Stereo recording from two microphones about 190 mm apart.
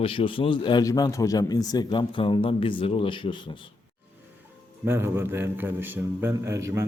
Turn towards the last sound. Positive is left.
turn(degrees=-15)  # may be behind; listen again after turning